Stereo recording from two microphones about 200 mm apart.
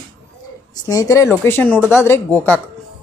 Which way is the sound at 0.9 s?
15° left (ahead or behind).